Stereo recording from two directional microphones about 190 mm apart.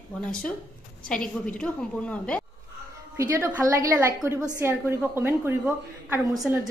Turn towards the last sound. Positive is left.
turn(degrees=-15)  # may be behind; listen again after turning